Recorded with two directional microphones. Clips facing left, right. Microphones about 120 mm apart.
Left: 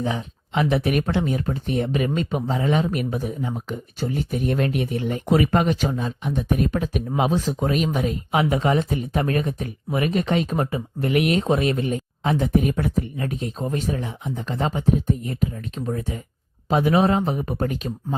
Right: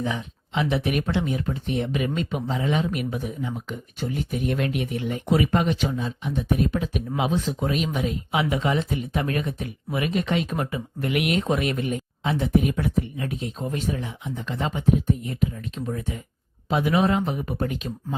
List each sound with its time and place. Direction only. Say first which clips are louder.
0.0 s speech: left 2 dB; 35° left (ahead or behind)
0.5 s speech: left 3 dB; 45° left (ahead or behind)